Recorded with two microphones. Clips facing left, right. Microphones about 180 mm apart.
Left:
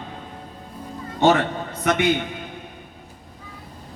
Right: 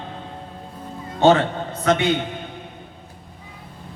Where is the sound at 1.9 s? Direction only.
25° right (ahead or behind).